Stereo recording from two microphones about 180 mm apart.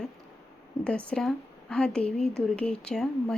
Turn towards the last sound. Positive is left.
turn(degrees=5)  # may be behind; listen again after turning